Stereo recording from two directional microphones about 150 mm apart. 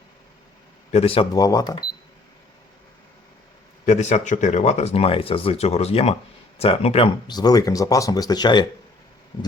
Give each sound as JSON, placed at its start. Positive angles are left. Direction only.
{"t": 0.9, "sound": "a man's voice", "side_deg": 40}
{"t": 1.3, "sound": "speech", "side_deg": 25}
{"t": 3.8, "sound": "speech", "side_deg": 50}
{"t": 7.3, "sound": "speech", "side_deg": 25}